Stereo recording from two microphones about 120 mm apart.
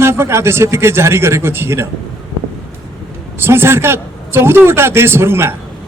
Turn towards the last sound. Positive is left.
turn(degrees=-20)  # may be behind; listen again after turning